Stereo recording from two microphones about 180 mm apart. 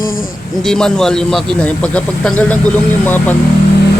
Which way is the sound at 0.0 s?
50° left (ahead or behind).